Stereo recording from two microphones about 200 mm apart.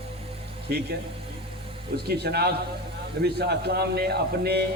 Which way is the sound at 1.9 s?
50° right (ahead or behind).